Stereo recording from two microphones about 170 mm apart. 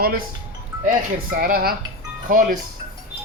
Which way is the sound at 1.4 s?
60° right (ahead or behind).